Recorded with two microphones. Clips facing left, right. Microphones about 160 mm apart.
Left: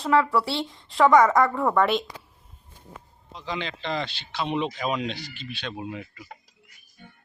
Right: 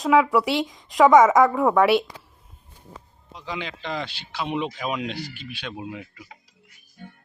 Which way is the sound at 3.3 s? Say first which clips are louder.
Left 1 dB; 10° right (ahead or behind).